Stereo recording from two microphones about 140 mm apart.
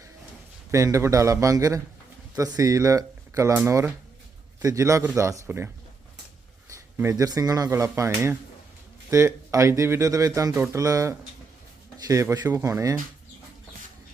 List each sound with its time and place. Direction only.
0.7 s speech: 20° right (ahead or behind)
6.9 s speech: 20° right (ahead or behind)